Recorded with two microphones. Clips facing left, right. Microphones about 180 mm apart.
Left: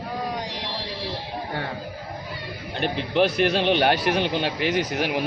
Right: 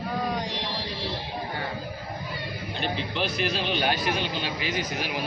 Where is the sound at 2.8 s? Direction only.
60° left (ahead or behind).